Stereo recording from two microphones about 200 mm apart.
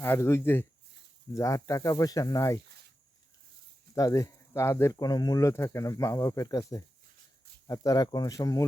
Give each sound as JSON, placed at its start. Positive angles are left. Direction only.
{"t": 0.0, "sound": "speech", "side_deg": 15}
{"t": 3.9, "sound": "speech", "side_deg": 15}